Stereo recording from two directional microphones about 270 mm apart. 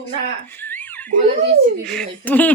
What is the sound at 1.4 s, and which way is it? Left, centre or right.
Speech, right.